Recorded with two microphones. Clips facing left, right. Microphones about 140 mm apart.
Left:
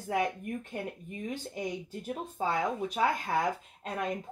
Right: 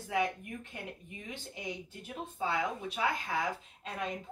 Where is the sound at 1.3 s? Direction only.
45° left (ahead or behind).